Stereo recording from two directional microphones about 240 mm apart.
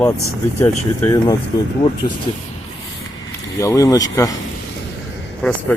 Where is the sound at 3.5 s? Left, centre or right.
Centre.